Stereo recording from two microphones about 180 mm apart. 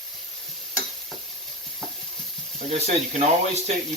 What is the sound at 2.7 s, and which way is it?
Speech, 35° right (ahead or behind).